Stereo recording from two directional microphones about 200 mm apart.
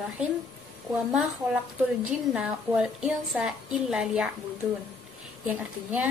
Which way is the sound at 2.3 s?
5° right (ahead or behind).